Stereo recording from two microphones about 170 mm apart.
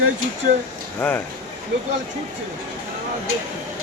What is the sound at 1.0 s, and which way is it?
Speech, 5° left (ahead or behind).